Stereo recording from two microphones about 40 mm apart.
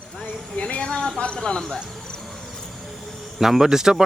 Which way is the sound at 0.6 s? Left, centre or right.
Left.